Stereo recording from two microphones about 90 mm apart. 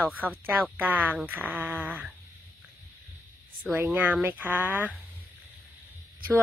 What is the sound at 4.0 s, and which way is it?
Speech, 20° right (ahead or behind).